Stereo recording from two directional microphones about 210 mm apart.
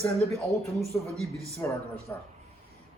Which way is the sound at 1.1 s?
10° left (ahead or behind).